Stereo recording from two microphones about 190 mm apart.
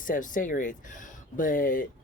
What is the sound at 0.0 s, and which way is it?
Speech, 45° left (ahead or behind).